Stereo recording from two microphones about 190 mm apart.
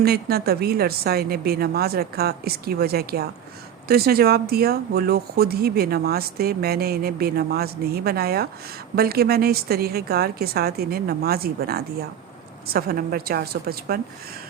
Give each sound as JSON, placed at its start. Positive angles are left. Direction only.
{"t": 0.0, "sound": "a woman's voice", "side_deg": -55}